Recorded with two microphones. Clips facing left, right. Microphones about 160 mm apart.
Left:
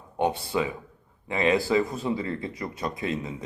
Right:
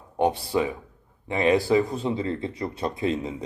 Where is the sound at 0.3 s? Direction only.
35° right (ahead or behind).